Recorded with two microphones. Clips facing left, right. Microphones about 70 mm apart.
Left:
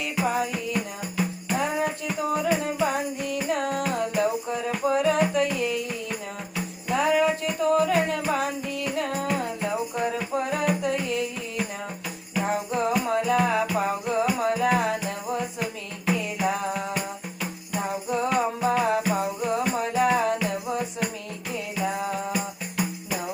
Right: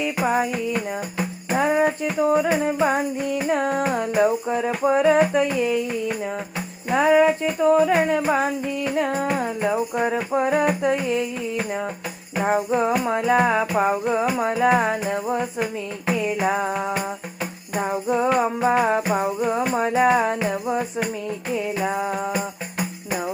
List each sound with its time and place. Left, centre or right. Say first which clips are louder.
0.2 s music: right 3 dB; right
6.8 s music: right 6 dB; right
12.3 s music: right 6 dB; right